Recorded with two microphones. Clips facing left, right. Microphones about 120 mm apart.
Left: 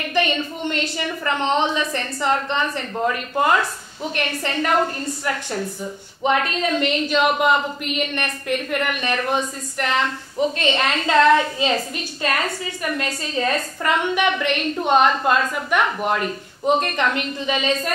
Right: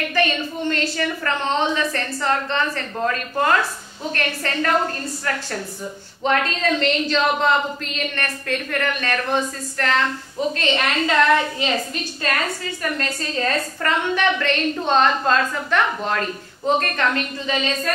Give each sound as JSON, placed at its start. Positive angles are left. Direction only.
{"t": 0.1, "sound": "a woman's voice", "side_deg": 20}